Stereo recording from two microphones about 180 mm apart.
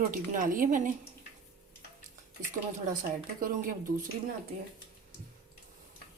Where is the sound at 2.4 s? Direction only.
45° right (ahead or behind).